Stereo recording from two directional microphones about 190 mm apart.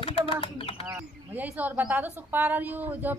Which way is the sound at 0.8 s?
10° right (ahead or behind).